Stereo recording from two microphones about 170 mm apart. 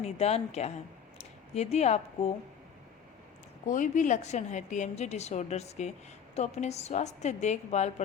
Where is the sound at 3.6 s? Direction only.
50° left (ahead or behind).